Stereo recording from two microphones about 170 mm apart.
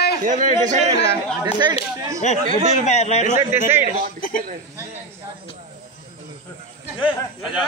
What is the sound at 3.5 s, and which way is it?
Speech, 15° right (ahead or behind).